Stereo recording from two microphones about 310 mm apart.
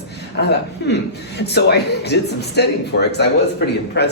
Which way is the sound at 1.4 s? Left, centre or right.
Left.